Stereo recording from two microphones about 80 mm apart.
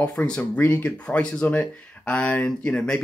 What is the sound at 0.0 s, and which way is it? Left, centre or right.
Speech, centre.